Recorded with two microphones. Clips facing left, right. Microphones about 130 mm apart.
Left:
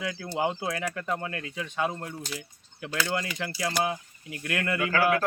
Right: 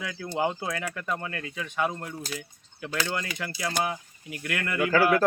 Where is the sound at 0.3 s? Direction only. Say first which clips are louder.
Right 1 dB; 15° left (ahead or behind).